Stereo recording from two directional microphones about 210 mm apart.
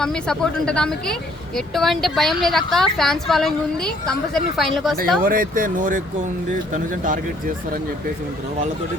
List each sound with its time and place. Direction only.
0.0 s speech: 5° left (ahead or behind)
5.2 s speech: 40° right (ahead or behind)